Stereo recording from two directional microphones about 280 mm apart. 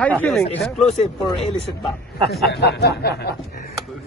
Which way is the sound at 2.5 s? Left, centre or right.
Left.